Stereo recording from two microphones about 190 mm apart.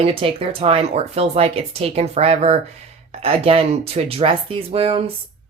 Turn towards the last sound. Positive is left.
turn(degrees=-30)  # may be behind; listen again after turning